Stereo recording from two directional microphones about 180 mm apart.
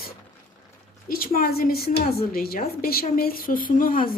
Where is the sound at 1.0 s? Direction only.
55° left (ahead or behind).